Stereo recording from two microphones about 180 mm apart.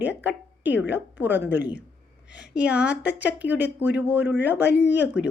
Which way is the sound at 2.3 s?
70° left (ahead or behind).